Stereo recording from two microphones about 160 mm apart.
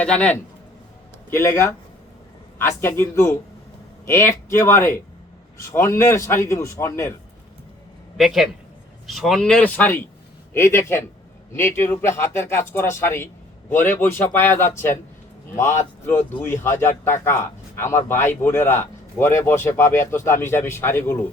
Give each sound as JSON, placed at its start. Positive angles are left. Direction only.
{"t": 0.0, "sound": "speech", "side_deg": 5}
{"t": 1.3, "sound": "speech", "side_deg": 15}
{"t": 8.2, "sound": "speech", "side_deg": 0}